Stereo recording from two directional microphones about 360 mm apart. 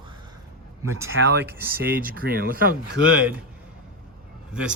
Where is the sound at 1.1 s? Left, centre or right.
Right.